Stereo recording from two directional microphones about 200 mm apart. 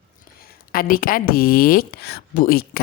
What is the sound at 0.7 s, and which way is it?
Speech, 45° left (ahead or behind).